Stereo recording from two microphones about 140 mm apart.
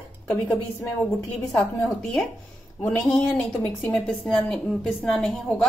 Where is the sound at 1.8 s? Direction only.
5° left (ahead or behind).